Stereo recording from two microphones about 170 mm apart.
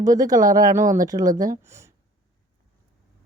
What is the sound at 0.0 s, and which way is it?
Speech, 20° right (ahead or behind).